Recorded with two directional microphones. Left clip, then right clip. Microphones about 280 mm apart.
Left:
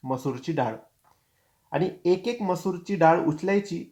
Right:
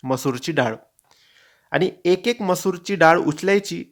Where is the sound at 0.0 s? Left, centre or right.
Right.